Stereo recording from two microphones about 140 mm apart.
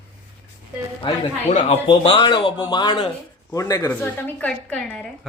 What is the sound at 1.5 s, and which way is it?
Speech, 55° left (ahead or behind).